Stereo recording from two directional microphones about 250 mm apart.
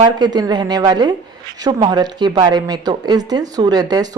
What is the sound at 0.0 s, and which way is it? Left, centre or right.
Speech, centre.